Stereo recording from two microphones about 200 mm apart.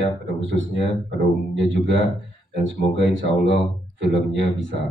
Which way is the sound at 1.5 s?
65° right (ahead or behind).